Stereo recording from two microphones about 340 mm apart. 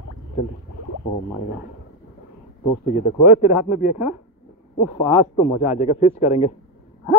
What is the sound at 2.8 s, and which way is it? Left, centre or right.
Speech, left.